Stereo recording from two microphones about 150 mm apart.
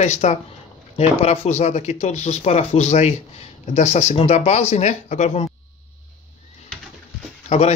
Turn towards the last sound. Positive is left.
turn(degrees=45)  # may be behind; listen again after turning